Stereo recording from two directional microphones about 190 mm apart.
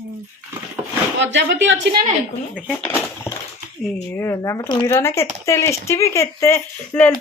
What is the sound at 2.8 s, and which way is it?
Speech, 10° left (ahead or behind).